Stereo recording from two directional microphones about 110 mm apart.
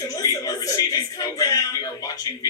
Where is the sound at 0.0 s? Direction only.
30° left (ahead or behind).